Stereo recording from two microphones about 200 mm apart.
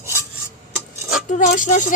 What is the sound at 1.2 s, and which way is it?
Speech, 40° left (ahead or behind).